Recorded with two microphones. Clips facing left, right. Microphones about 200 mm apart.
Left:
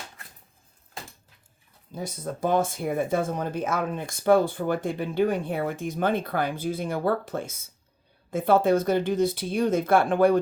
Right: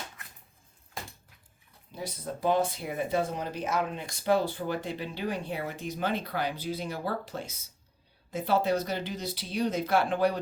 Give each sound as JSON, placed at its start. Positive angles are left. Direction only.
{"t": 1.9, "sound": "speech", "side_deg": 45}